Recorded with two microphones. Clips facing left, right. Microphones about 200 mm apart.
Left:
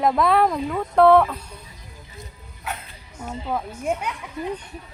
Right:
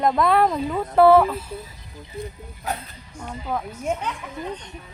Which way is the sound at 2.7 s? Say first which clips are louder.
Right 3 dB; 40° right (ahead or behind).